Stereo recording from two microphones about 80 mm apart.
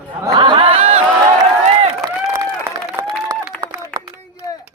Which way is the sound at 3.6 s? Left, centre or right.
Right.